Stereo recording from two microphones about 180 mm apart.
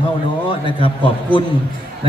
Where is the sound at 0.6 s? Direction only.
30° left (ahead or behind).